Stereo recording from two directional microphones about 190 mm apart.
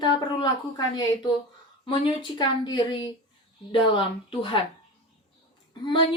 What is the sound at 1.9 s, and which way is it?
Speech, 25° left (ahead or behind).